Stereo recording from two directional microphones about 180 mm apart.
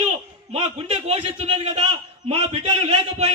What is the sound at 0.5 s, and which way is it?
A man's voice, 35° right (ahead or behind).